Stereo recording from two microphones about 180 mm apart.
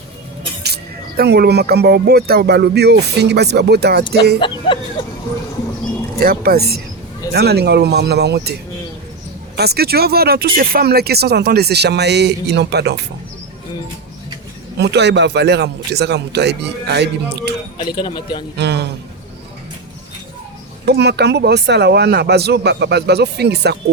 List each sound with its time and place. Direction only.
0.6 s speech: 65° right (ahead or behind)
4.4 s a man's voice: 25° left (ahead or behind)
6.1 s speech: 55° right (ahead or behind)
9.6 s speech: 60° right (ahead or behind)
14.8 s speech: 70° right (ahead or behind)
17.9 s a man's voice: 25° left (ahead or behind)
18.5 s speech: 70° right (ahead or behind)
20.8 s speech: 65° right (ahead or behind)